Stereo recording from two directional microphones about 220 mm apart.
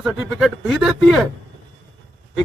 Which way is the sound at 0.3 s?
Centre (ahead or behind).